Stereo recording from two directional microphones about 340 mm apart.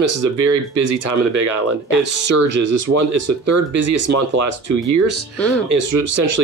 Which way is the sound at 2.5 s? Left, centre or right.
Right.